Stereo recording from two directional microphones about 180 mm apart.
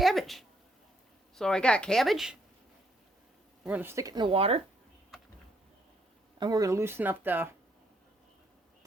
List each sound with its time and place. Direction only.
0.0 s a sound: centre (ahead or behind)
1.4 s speech: 5° left (ahead or behind)
3.6 s speech: 10° right (ahead or behind); by 4.6 s 30° right (ahead or behind)
6.4 s speech: 20° right (ahead or behind)